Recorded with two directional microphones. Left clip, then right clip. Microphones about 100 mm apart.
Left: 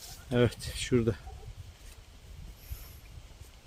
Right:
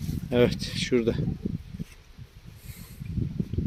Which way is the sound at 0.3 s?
Centre (ahead or behind).